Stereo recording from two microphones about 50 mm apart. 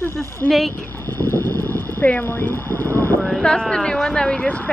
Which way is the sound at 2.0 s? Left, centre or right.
Left.